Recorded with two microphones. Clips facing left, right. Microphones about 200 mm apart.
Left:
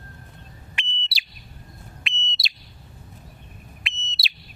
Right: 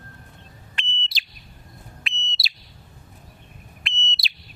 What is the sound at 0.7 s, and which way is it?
Bird, 10° left (ahead or behind).